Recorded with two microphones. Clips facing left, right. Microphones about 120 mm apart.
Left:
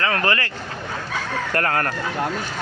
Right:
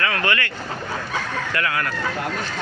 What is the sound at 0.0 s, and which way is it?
Speech, 35° left (ahead or behind).